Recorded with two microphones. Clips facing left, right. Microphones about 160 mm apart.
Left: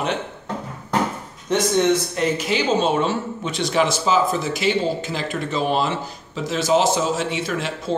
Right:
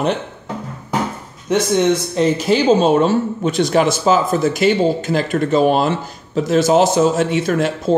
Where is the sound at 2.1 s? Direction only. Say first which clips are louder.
Right 6 dB; 35° right (ahead or behind).